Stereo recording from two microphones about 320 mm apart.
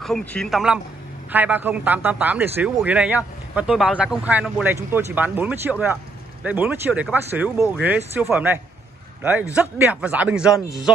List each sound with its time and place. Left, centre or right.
0.0 s a man's voice: centre